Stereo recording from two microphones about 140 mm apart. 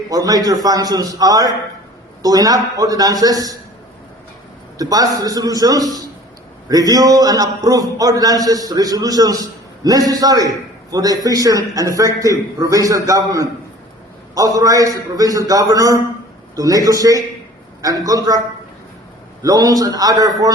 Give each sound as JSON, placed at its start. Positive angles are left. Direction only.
{"t": 0.1, "sound": "a man's voice", "side_deg": -25}
{"t": 4.8, "sound": "a man's voice", "side_deg": -25}
{"t": 19.4, "sound": "a man's voice", "side_deg": -25}